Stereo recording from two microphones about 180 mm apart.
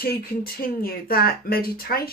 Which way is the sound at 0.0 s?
55° left (ahead or behind).